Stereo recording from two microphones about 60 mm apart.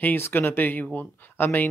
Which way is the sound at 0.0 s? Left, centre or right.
Left.